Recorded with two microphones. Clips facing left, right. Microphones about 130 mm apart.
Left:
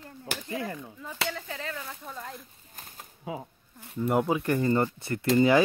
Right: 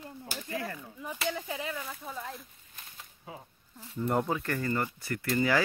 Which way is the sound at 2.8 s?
45° left (ahead or behind).